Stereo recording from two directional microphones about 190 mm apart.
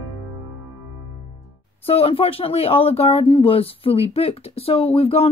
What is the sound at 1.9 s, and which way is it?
Speech, 30° left (ahead or behind).